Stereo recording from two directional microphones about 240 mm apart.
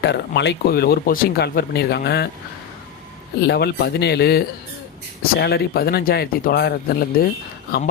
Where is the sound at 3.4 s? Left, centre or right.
Left.